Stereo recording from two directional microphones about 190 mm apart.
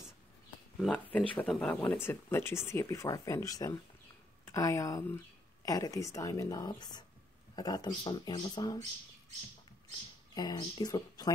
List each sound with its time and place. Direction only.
0.7 s speech: 5° left (ahead or behind)
10.3 s speech: 20° left (ahead or behind)